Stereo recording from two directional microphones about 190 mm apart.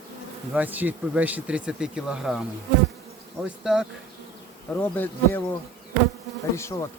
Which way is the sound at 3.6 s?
5° right (ahead or behind).